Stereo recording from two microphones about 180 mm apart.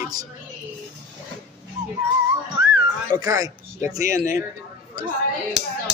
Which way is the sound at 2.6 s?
20° right (ahead or behind).